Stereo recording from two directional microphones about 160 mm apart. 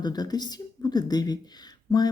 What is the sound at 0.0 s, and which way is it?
Speech, 25° left (ahead or behind).